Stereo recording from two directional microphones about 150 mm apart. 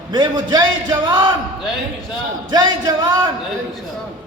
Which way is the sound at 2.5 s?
30° right (ahead or behind).